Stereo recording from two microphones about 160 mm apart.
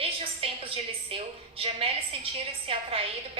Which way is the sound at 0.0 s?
35° right (ahead or behind).